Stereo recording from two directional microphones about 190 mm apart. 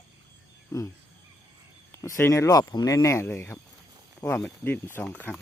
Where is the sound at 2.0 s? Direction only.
15° left (ahead or behind).